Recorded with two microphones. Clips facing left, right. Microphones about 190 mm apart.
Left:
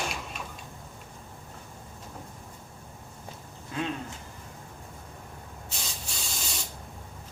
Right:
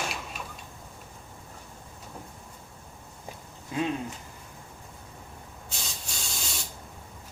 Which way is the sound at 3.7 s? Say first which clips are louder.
Right 3 dB; 15° right (ahead or behind).